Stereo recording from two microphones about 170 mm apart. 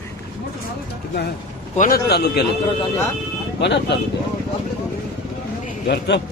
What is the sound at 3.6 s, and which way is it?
Speech, 85° left.